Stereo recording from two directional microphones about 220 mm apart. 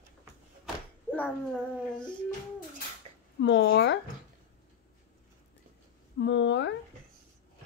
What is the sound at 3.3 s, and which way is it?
Speech, 55° left (ahead or behind).